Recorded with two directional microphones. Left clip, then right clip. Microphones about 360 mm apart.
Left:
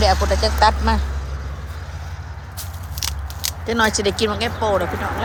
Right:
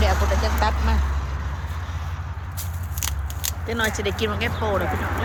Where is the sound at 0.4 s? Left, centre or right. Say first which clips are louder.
Left 5 dB; centre.